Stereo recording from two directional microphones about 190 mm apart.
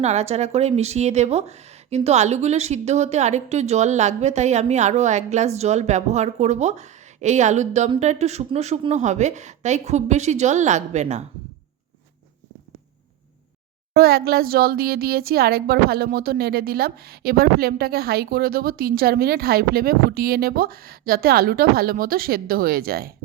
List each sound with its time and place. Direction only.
0.0 s speech: 35° right (ahead or behind)
13.9 s speech: 55° right (ahead or behind)